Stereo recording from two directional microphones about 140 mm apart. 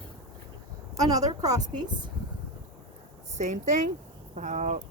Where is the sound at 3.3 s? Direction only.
60° right (ahead or behind).